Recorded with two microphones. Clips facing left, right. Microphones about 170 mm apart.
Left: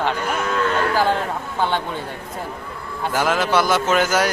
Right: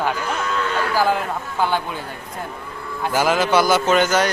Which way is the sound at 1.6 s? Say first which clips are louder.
Right 1 dB; 5° right (ahead or behind).